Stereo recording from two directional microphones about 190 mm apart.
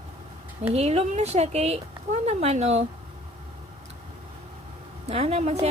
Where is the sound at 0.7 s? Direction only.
35° right (ahead or behind).